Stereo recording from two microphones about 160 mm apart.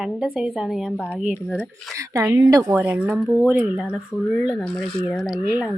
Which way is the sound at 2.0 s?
15° right (ahead or behind).